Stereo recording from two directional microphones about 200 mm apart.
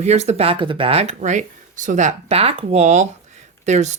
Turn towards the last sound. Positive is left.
turn(degrees=-35)  # may be behind; listen again after turning